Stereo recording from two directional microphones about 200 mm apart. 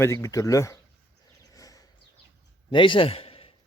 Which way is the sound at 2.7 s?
25° left (ahead or behind).